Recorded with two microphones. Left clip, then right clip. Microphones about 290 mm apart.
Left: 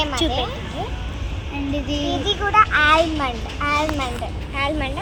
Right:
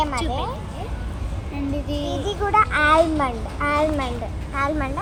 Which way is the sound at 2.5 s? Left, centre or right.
Centre.